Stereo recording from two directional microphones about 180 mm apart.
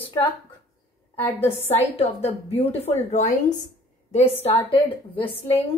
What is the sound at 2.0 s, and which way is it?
A woman's voice, 35° left (ahead or behind).